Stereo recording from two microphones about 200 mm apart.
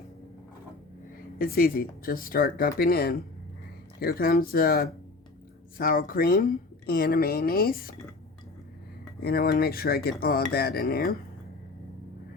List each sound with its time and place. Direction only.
1.4 s speech: 45° left (ahead or behind)
9.2 s speech: 50° left (ahead or behind)